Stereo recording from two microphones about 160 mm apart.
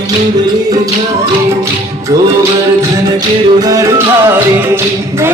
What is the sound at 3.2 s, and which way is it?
Music, 25° right (ahead or behind).